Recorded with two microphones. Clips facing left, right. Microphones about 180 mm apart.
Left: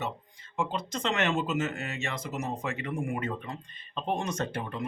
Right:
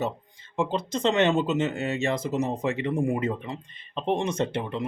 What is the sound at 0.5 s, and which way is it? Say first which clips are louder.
Speech: right 5 dB; 25° right (ahead or behind).